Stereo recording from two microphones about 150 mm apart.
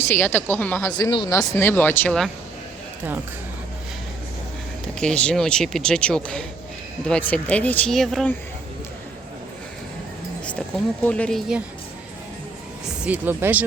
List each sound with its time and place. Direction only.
0.0 s speech: 15° left (ahead or behind)
0.9 s speech: 25° left (ahead or behind); by 2.3 s 5° left (ahead or behind)
4.9 s speech: 5° left (ahead or behind)
11.0 s speech: 5° left (ahead or behind)
13.0 s speech: 10° right (ahead or behind)